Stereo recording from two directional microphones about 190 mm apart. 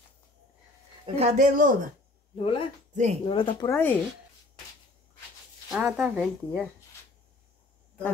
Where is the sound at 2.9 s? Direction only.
40° right (ahead or behind).